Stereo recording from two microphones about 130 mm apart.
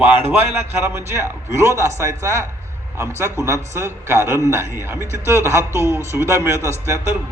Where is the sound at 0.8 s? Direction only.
20° right (ahead or behind).